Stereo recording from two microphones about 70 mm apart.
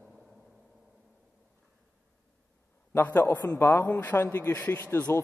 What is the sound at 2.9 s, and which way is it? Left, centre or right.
A man's voice, left.